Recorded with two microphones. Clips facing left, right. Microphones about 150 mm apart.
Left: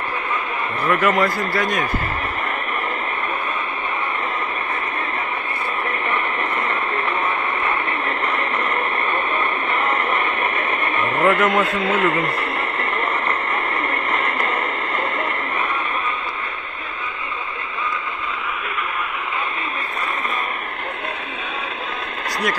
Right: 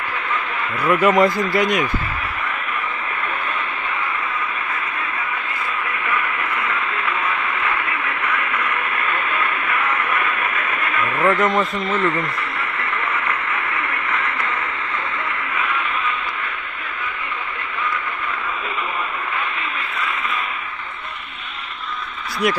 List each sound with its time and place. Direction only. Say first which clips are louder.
0.8 s a man's voice: right 3 dB; 10° right (ahead or behind)
6.7 s radio: left 1 dB; 30° left (ahead or behind)
11.2 s a man's voice: even; 5° left (ahead or behind)
12.5 s radio: left 2 dB; 35° left (ahead or behind)
15.5 s a sound: right 2 dB; 35° left (ahead or behind)